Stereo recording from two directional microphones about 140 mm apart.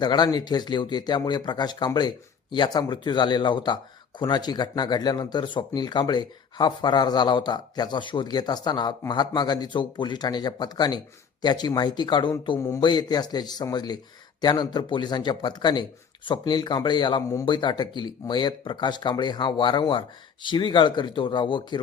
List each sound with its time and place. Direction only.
0.0 s speech: 30° left (ahead or behind)
12.5 s speech: 20° left (ahead or behind)
12.8 s speech: 30° left (ahead or behind)